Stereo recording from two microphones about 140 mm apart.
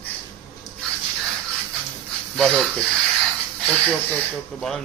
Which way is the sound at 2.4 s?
Centre (ahead or behind).